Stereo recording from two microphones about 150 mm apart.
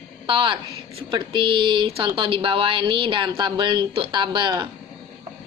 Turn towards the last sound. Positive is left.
turn(degrees=-30)  # may be behind; listen again after turning